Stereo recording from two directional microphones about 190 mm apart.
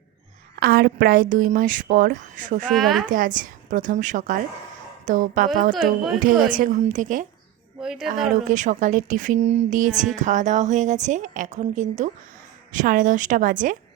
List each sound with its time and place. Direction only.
0.6 s a woman's voice: 55° right (ahead or behind)
2.6 s speech: centre (ahead or behind)
3.1 s a woman's voice: 45° right (ahead or behind)
5.7 s speech: centre (ahead or behind)
6.5 s a woman's voice: 45° right (ahead or behind)
7.8 s a woman's voice: centre (ahead or behind)
8.4 s a woman's voice: 40° right (ahead or behind)